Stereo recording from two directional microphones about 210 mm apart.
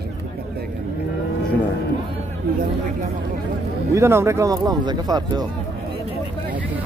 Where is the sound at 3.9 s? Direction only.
10° right (ahead or behind).